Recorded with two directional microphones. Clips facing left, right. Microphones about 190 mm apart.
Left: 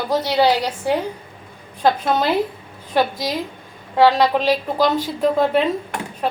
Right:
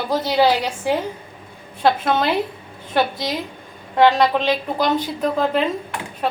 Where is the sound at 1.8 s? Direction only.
Centre (ahead or behind).